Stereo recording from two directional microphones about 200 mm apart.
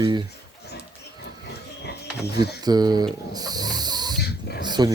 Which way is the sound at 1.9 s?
55° left (ahead or behind).